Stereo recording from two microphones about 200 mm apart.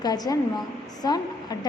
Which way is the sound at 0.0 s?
20° left (ahead or behind).